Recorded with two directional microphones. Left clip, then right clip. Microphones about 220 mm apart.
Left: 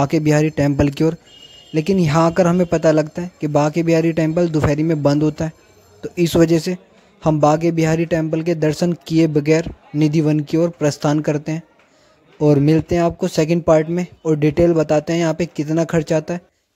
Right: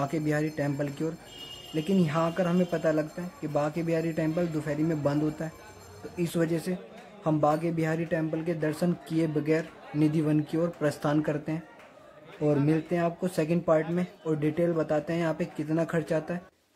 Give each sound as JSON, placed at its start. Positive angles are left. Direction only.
{"t": 0.0, "sound": "speech", "side_deg": 45}